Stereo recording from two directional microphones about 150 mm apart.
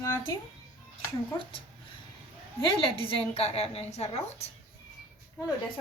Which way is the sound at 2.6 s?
35° left (ahead or behind).